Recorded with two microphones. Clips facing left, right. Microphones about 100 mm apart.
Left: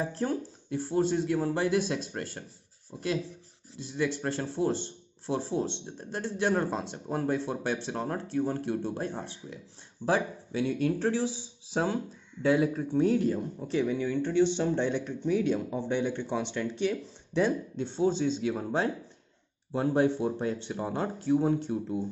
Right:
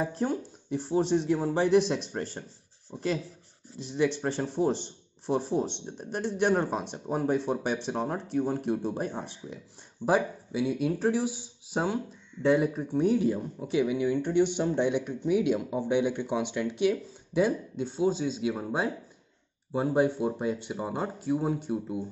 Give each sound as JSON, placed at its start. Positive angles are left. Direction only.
{"t": 0.2, "sound": "speech", "side_deg": -15}
{"t": 3.8, "sound": "speech", "side_deg": -20}